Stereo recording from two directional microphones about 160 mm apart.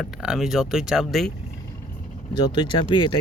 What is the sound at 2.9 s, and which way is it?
Speech, 30° left (ahead or behind).